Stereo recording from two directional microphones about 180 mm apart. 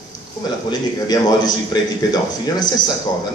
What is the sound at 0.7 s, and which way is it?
Speech, 20° left (ahead or behind).